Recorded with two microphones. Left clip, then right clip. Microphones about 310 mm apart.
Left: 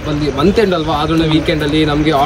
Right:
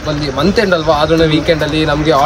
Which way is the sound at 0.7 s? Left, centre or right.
Centre.